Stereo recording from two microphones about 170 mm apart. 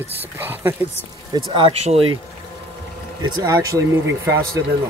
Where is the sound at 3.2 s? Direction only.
25° right (ahead or behind).